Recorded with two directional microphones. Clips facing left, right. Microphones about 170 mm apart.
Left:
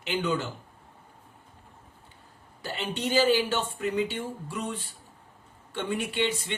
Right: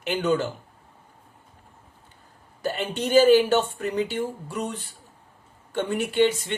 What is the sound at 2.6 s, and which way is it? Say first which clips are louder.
Speech: right 5 dB; 45° right (ahead or behind).